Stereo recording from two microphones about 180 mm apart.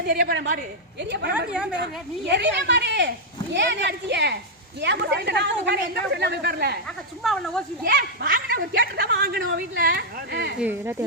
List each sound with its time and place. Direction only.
0.1 s speech: 60° right (ahead or behind)
2.3 s a woman's voice: 75° right (ahead or behind)
7.2 s speech: centre (ahead or behind)
7.9 s speech: 60° right (ahead or behind)
9.2 s speech: 55° right (ahead or behind)
10.6 s speech: 10° right (ahead or behind)